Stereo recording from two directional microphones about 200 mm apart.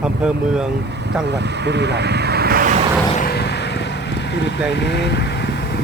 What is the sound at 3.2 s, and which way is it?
Vehicle, 50° left (ahead or behind).